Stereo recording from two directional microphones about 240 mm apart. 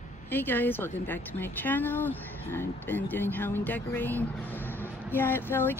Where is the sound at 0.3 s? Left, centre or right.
Centre.